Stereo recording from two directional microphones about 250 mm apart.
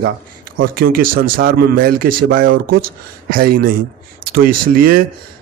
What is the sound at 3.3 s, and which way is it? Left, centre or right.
Speech, right.